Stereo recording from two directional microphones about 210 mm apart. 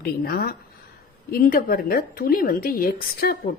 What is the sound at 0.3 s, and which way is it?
A woman's voice, 45° left (ahead or behind).